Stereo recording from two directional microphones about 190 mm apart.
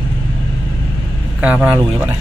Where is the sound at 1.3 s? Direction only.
5° right (ahead or behind).